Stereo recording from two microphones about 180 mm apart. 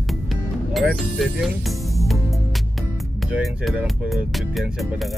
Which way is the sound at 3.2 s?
5° right (ahead or behind).